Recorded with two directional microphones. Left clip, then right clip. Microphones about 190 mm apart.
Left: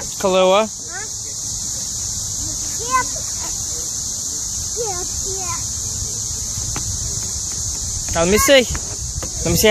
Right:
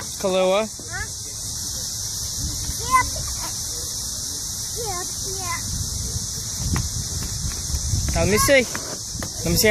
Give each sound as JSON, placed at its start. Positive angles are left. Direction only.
{"t": 0.2, "sound": "speech", "side_deg": 15}
{"t": 2.9, "sound": "speech", "side_deg": -5}
{"t": 8.1, "sound": "speech", "side_deg": 20}